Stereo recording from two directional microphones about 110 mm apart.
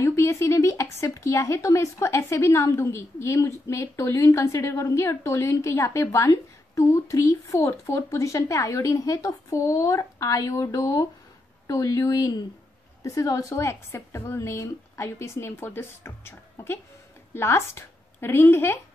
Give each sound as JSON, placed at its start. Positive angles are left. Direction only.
{"t": 0.0, "sound": "a woman's voice", "side_deg": 25}